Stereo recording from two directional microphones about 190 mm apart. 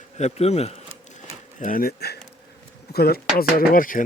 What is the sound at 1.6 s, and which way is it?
Speech, 50° left (ahead or behind).